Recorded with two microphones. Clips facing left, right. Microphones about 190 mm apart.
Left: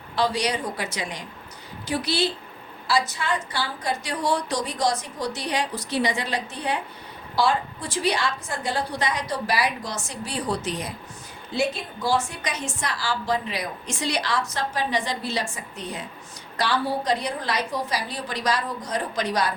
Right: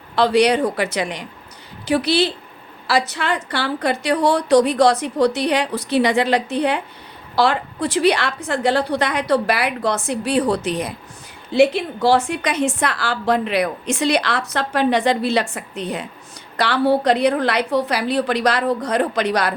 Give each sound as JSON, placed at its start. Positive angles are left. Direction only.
{"t": 0.2, "sound": "a woman's voice", "side_deg": -65}